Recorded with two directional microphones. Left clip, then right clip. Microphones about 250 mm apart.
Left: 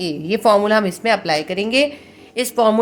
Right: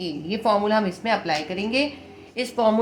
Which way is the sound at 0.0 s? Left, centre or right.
Left.